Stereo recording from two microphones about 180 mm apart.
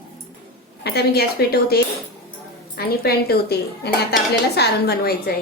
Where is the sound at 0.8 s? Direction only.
60° left (ahead or behind).